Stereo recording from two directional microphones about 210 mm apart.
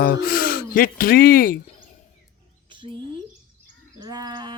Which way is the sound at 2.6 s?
25° right (ahead or behind).